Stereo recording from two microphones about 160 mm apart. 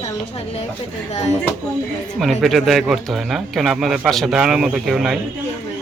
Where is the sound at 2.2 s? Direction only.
Centre (ahead or behind).